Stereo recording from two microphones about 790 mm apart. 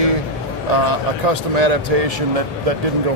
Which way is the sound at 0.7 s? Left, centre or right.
Right.